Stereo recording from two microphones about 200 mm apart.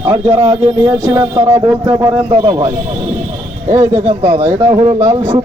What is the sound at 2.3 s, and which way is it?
Speech, 25° right (ahead or behind).